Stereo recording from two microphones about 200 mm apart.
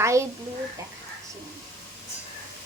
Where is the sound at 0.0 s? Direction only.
15° right (ahead or behind).